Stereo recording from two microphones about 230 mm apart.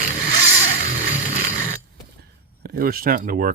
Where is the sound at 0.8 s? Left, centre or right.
Right.